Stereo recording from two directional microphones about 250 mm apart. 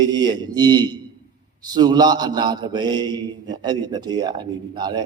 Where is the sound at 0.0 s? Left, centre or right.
Centre.